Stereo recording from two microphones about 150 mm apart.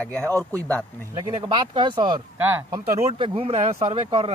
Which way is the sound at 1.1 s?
30° right (ahead or behind).